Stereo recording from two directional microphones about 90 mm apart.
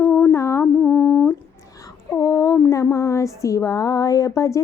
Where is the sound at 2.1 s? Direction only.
35° left (ahead or behind).